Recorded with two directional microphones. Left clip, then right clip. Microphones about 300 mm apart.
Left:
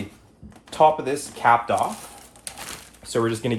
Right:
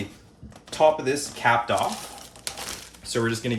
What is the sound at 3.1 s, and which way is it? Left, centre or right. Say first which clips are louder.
Speech: left 3 dB; centre.